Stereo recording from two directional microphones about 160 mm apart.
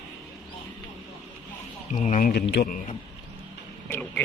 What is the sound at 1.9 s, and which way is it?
Speech, 50° left (ahead or behind).